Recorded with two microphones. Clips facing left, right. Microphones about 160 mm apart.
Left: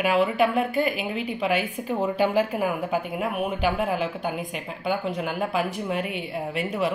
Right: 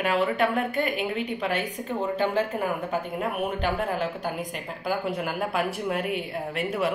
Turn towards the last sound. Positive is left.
turn(degrees=0)  # may be behind; listen again after turning